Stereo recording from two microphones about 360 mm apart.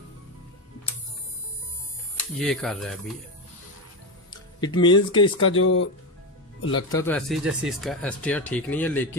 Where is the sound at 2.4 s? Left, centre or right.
Centre.